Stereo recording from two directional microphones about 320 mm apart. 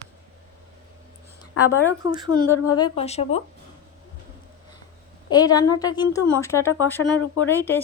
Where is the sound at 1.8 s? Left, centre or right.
Centre.